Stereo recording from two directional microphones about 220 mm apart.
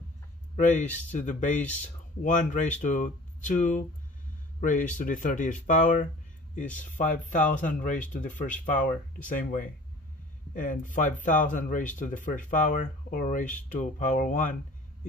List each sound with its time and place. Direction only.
0.6 s speech: 35° left (ahead or behind)